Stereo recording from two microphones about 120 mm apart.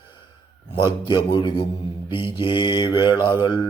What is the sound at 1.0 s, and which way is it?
Mantra, 40° left (ahead or behind).